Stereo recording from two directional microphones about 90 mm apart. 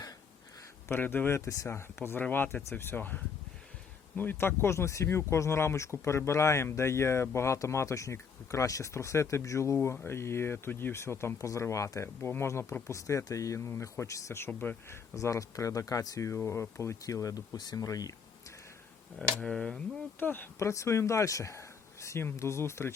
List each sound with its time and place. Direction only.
0.9 s speech: 20° left (ahead or behind)
1.4 s speech: 35° left (ahead or behind)
4.2 s speech: 25° left (ahead or behind)
15.1 s speech: 35° left (ahead or behind)
19.4 s speech: 10° left (ahead or behind)
20.1 s speech: 20° left (ahead or behind)